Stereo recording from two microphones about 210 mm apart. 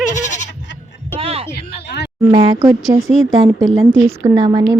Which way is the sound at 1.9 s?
55° left (ahead or behind).